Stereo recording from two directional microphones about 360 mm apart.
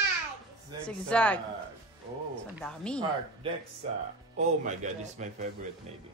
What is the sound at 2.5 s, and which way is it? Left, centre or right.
Speech, centre.